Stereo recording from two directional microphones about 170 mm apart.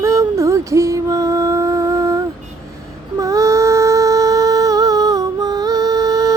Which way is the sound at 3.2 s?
20° right (ahead or behind).